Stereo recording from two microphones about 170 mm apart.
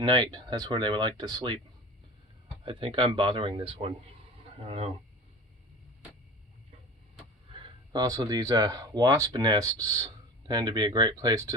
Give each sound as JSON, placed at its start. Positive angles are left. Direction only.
{"t": 0.0, "sound": "speech", "side_deg": -25}
{"t": 2.6, "sound": "speech", "side_deg": -30}
{"t": 7.9, "sound": "speech", "side_deg": -25}